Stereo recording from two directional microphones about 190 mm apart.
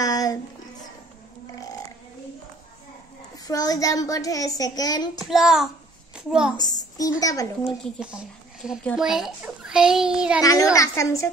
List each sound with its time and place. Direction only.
0.0 s a sound: 20° left (ahead or behind)
1.5 s burping: 20° left (ahead or behind)
3.4 s a child's voice: 20° left (ahead or behind)
5.2 s a child's voice: centre (ahead or behind)
6.5 s a child's voice: 20° left (ahead or behind)
8.0 s a child's voice: 5° right (ahead or behind)
10.4 s a woman's voice: 20° left (ahead or behind)